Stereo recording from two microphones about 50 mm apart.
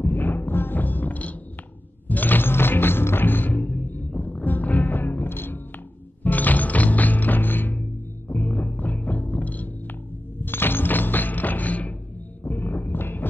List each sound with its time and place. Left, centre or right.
0.0 s music: left
6.2 s music: left
10.4 s music: left
12.4 s a sound: left